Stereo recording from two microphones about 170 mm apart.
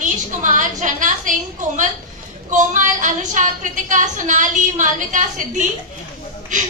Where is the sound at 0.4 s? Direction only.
50° right (ahead or behind).